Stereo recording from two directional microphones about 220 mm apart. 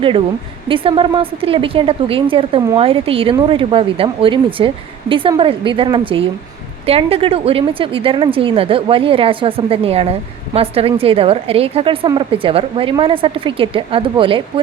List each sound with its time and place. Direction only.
0.7 s speech: 25° right (ahead or behind)